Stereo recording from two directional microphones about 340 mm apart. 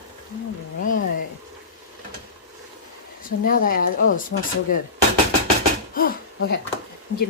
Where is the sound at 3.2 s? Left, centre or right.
Left.